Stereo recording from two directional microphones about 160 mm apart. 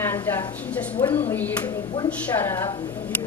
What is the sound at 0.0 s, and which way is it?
A woman's voice, 15° left (ahead or behind).